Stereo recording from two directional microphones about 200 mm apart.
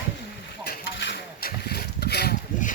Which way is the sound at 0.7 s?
55° left (ahead or behind).